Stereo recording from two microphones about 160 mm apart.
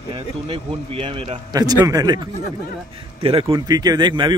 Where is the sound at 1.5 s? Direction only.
25° right (ahead or behind).